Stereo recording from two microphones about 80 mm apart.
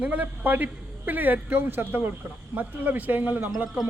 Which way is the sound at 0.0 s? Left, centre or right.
Centre.